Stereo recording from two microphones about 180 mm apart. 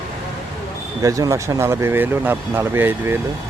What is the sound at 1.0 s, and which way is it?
Speech, 20° right (ahead or behind).